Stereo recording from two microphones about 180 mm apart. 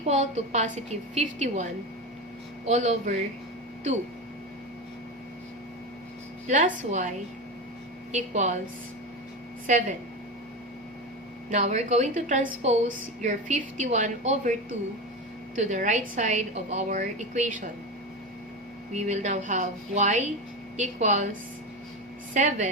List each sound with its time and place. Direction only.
0.1 s a woman's voice: 40° right (ahead or behind)
2.6 s a woman's voice: 40° right (ahead or behind)
6.5 s a woman's voice: 45° right (ahead or behind)
8.1 s a woman's voice: 40° right (ahead or behind)
11.5 s a woman's voice: 40° right (ahead or behind)
15.5 s a woman's voice: 45° right (ahead or behind)
18.9 s a woman's voice: 40° right (ahead or behind)
22.4 s a woman's voice: 40° right (ahead or behind)